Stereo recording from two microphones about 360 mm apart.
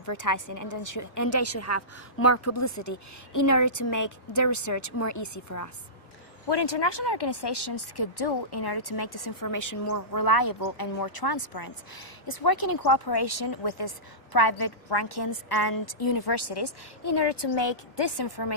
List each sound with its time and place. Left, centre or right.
0.0 s a woman's voice: left
7.1 s speech: left